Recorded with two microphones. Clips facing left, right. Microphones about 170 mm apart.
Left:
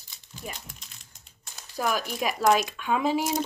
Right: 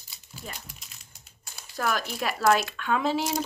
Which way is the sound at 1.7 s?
15° left (ahead or behind).